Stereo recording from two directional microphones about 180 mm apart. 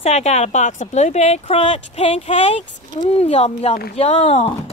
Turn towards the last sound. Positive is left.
turn(degrees=35)  # may be behind; listen again after turning